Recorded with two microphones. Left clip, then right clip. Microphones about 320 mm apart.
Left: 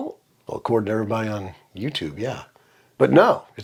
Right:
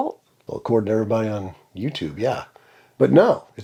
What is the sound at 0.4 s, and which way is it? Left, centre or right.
Speech, left.